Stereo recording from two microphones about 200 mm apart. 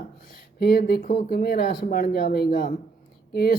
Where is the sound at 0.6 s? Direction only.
50° left (ahead or behind).